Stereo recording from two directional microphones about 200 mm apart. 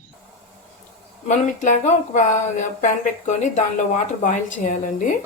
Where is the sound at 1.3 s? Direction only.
35° left (ahead or behind).